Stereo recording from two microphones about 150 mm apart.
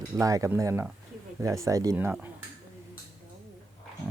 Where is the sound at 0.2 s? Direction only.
20° right (ahead or behind).